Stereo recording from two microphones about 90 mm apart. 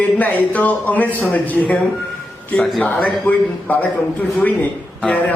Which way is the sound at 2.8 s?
15° left (ahead or behind).